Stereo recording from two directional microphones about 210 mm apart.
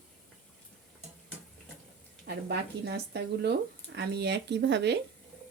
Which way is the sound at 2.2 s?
50° right (ahead or behind).